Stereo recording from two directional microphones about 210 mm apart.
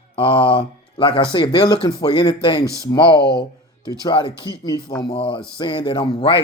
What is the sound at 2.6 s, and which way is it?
Speech, 15° right (ahead or behind).